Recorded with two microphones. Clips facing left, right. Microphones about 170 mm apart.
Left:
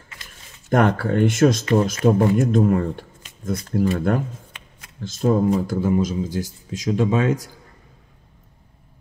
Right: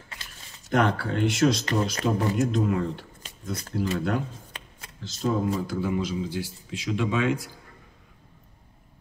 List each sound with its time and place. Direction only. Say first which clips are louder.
0.7 s speech: left 5 dB; 50° left (ahead or behind)
4.5 s shuffling cards: right 2 dB; 35° right (ahead or behind)
5.0 s speech: left 7 dB; 50° left (ahead or behind)